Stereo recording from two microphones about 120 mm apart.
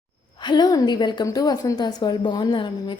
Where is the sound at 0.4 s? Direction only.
35° left (ahead or behind).